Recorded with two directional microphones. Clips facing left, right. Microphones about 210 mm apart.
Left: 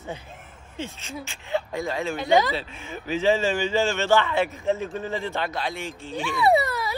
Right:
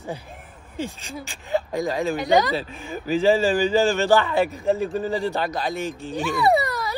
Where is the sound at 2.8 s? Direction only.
35° right (ahead or behind).